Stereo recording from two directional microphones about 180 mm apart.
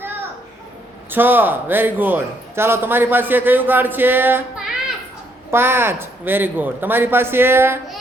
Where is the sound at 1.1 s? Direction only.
10° right (ahead or behind).